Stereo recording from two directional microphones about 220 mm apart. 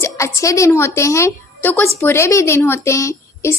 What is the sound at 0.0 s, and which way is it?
A woman's voice, 15° left (ahead or behind).